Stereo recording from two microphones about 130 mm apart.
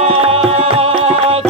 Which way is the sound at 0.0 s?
50° right (ahead or behind).